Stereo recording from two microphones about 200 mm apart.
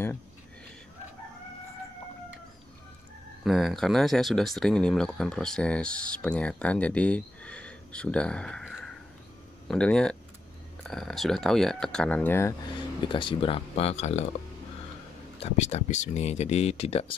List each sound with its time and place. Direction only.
3.4 s speech: centre (ahead or behind); by 14.2 s 35° left (ahead or behind)
15.4 s speech: 35° left (ahead or behind)